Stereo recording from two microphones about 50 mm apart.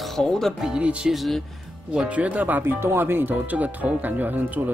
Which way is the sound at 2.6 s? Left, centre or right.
Right.